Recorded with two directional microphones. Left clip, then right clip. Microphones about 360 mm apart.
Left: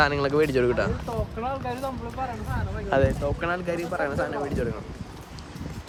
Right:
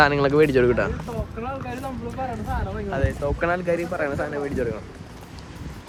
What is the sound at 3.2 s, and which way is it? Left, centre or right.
Speech, centre.